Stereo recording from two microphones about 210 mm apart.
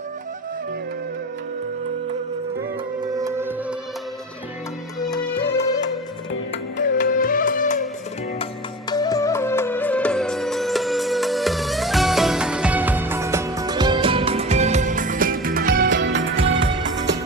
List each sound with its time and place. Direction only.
3.0 s music: 15° right (ahead or behind)
4.9 s music: 20° left (ahead or behind)
6.7 s music: 40° left (ahead or behind)
8.9 s music: 15° left (ahead or behind); by 16.7 s 65° right (ahead or behind)